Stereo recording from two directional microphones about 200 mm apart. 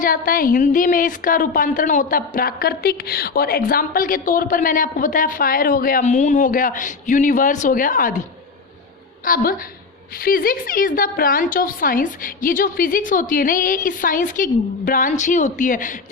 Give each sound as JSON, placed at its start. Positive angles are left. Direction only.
{"t": 0.0, "sound": "a woman's voice", "side_deg": 45}
{"t": 9.2, "sound": "a woman's voice", "side_deg": 45}